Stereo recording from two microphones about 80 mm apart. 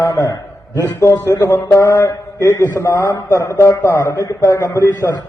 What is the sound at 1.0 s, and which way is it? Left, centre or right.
Mantra, left.